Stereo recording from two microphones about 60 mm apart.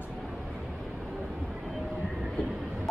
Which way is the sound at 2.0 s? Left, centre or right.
Centre.